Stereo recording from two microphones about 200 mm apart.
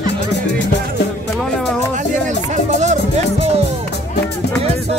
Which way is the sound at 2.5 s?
35° right (ahead or behind).